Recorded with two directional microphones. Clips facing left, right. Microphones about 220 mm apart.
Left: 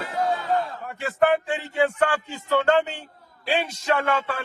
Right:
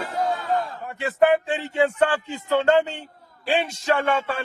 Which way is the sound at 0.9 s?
25° right (ahead or behind).